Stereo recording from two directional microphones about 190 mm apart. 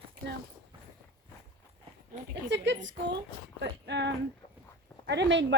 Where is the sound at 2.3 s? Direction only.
70° right (ahead or behind).